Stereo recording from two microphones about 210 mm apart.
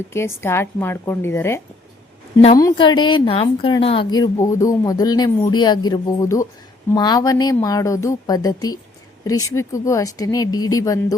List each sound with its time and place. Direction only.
0.1 s a woman's voice: 10° left (ahead or behind)